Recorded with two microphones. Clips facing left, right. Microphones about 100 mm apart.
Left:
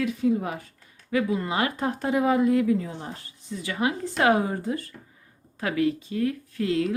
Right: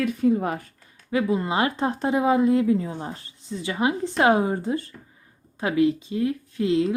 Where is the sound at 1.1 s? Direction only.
25° right (ahead or behind).